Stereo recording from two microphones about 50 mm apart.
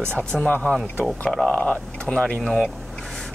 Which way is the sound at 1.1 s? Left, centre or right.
Centre.